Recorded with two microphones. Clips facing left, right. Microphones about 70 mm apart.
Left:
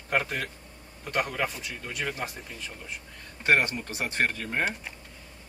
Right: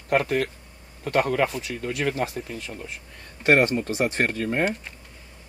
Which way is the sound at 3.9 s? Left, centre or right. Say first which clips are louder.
Right 5 dB; right.